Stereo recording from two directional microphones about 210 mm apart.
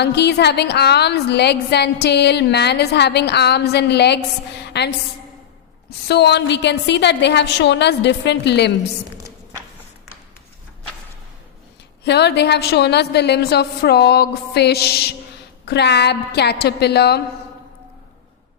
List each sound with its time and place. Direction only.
0.0 s a woman's voice: 55° left (ahead or behind)
6.1 s a woman's voice: 55° left (ahead or behind)
12.0 s a woman's voice: 55° left (ahead or behind)